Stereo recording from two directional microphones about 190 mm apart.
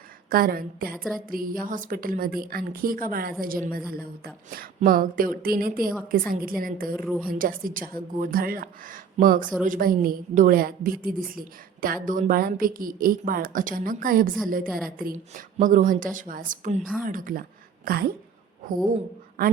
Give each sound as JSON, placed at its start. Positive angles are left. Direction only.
{"t": 0.3, "sound": "a woman's voice", "side_deg": -50}
{"t": 6.9, "sound": "a woman's voice", "side_deg": -5}
{"t": 7.3, "sound": "a woman's voice", "side_deg": -45}